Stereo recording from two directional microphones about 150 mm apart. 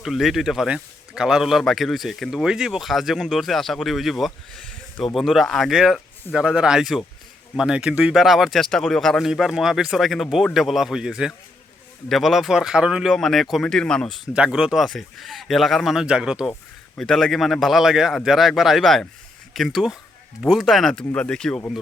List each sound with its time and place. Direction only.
0.0 s speech: centre (ahead or behind)
14.3 s speech: 5° right (ahead or behind)